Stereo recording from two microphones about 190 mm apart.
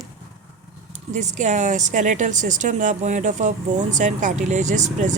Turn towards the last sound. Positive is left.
turn(degrees=-40)  # may be behind; listen again after turning